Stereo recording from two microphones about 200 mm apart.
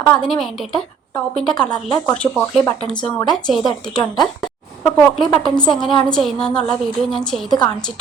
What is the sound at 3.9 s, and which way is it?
Speech, 20° left (ahead or behind).